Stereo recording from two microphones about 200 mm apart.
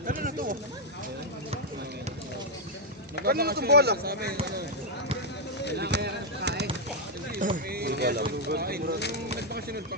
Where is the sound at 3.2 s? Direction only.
50° right (ahead or behind).